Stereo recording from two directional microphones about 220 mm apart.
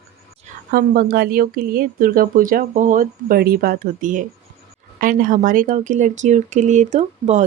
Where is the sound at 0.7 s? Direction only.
45° right (ahead or behind).